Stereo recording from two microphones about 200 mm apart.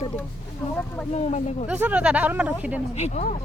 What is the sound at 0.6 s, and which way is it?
Speech, 15° left (ahead or behind).